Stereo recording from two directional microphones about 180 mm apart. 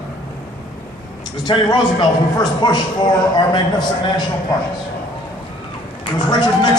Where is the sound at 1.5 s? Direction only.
25° left (ahead or behind).